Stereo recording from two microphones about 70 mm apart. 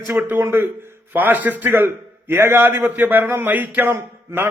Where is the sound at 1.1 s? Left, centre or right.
Right.